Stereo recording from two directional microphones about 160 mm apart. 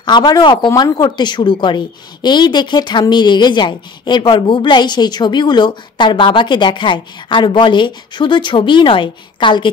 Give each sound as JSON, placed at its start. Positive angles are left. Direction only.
{"t": 0.0, "sound": "a woman's voice", "side_deg": 25}